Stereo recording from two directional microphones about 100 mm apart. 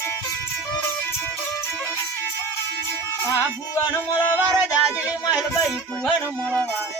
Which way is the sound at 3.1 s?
30° left (ahead or behind).